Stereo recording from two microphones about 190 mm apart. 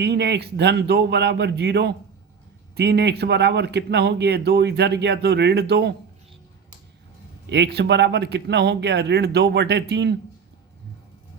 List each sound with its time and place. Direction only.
0.0 s speech: 60° right (ahead or behind)
7.5 s speech: 60° right (ahead or behind)